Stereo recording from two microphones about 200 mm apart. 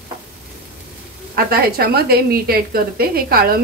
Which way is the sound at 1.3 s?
50° right (ahead or behind).